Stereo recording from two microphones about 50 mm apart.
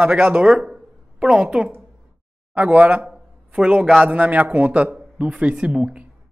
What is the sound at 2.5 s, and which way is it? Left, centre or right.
A man's voice, right.